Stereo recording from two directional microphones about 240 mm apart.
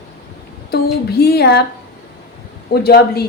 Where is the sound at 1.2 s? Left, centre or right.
Left.